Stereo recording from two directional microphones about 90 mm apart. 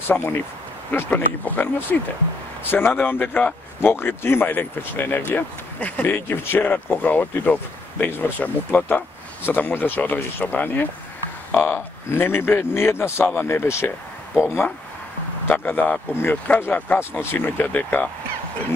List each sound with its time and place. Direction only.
0.0 s a man's voice: 25° left (ahead or behind)
15.4 s a man's voice: 20° left (ahead or behind)